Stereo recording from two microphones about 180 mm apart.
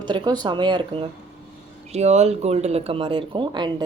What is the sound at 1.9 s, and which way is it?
A woman's voice, 35° right (ahead or behind).